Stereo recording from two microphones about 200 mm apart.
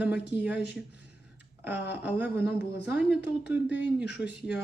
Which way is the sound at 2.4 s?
55° left (ahead or behind).